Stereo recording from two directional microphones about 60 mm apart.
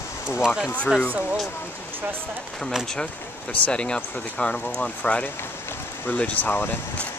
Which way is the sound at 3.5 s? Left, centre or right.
Centre.